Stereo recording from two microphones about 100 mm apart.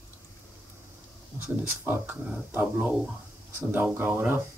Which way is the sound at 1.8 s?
20° right (ahead or behind).